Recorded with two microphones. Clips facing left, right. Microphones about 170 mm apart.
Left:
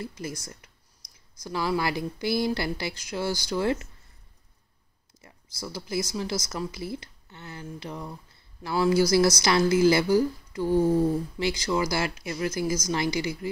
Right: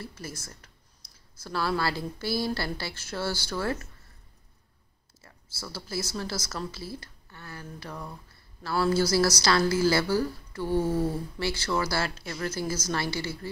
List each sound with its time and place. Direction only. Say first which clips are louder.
0.0 s a woman's voice: left 5 dB; 15° left (ahead or behind)
5.2 s a woman's voice: left 4 dB; 15° left (ahead or behind)